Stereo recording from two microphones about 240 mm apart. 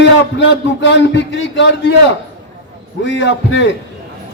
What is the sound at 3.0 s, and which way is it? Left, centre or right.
Speech, left.